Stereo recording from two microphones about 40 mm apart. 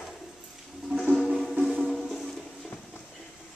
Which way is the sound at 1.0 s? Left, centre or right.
Centre.